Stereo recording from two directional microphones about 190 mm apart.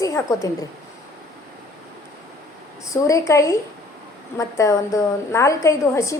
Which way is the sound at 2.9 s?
15° left (ahead or behind).